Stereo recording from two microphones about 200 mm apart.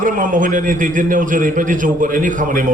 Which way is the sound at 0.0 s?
40° right (ahead or behind).